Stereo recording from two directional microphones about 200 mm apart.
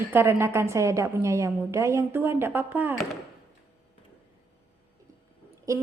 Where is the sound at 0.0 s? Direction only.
10° right (ahead or behind).